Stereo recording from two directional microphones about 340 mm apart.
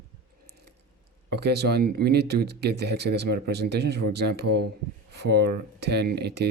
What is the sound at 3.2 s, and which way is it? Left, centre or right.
Speech, right.